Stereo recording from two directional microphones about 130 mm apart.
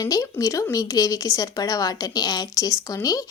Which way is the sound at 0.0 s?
25° left (ahead or behind).